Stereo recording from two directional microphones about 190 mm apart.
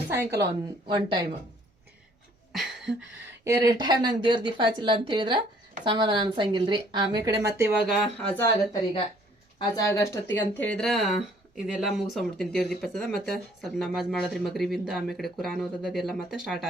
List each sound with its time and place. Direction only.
0.1 s a sound: 15° right (ahead or behind)
0.9 s speech: 25° right (ahead or behind)
2.5 s a sound: centre (ahead or behind)
3.4 s speech: 20° right (ahead or behind)
7.9 s speech: centre (ahead or behind)
9.6 s speech: 20° left (ahead or behind); by 16.6 s centre (ahead or behind)